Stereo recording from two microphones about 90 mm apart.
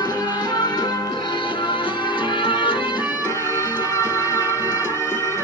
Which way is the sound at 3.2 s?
35° left (ahead or behind).